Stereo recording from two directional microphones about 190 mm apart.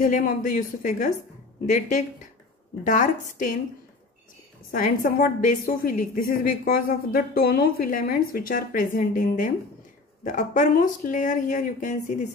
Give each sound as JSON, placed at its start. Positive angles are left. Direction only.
{"t": 0.0, "sound": "a woman's voice", "side_deg": 45}
{"t": 4.6, "sound": "a woman's voice", "side_deg": 45}